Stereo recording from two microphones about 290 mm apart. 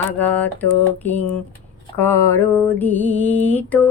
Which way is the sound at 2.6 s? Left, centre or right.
Centre.